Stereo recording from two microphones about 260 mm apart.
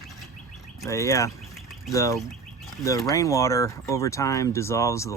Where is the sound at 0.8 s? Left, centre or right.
Centre.